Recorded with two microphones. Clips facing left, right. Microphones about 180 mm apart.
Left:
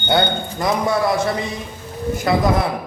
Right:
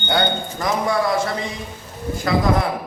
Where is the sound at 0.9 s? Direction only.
20° left (ahead or behind).